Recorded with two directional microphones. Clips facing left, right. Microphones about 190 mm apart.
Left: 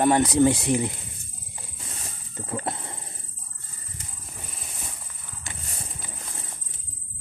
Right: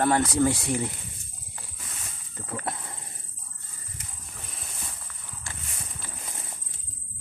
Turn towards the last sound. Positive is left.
turn(degrees=20)  # may be behind; listen again after turning